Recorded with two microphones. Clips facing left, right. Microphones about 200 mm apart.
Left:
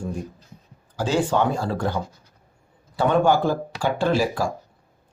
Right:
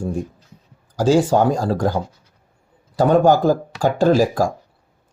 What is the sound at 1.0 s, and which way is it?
Speech, 40° right (ahead or behind).